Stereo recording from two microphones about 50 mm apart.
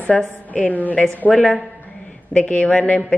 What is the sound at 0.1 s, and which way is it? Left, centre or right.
Speech, centre.